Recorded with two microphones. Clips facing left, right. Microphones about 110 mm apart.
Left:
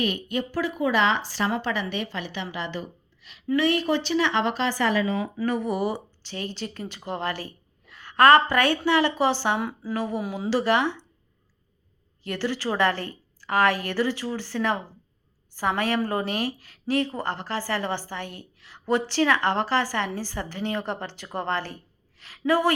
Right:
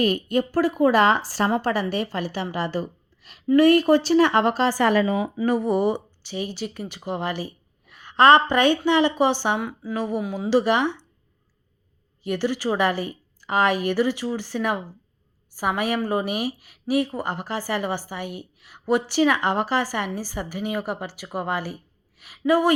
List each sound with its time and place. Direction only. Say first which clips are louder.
0.0 s a woman's voice: right 5 dB; 40° right (ahead or behind)
5.0 s speech: right 3 dB; 20° right (ahead or behind)
5.5 s speech: right 5 dB; 35° right (ahead or behind)
6.2 s a woman's voice: right 4 dB; 10° right (ahead or behind)
9.6 s a woman's voice: even; centre (ahead or behind)
9.9 s speech: right 2 dB; 15° right (ahead or behind)
10.2 s a man's voice: right 2 dB; 5° left (ahead or behind)
10.5 s speech: right 3 dB; 15° right (ahead or behind)
12.2 s speech: right 4 dB; 15° right (ahead or behind)